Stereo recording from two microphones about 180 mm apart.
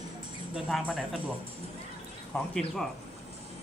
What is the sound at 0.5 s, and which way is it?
Speech, centre (ahead or behind).